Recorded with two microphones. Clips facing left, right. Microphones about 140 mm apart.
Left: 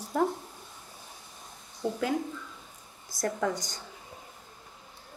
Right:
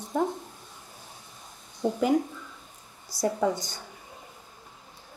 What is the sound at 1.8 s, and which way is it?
Speech, 15° right (ahead or behind).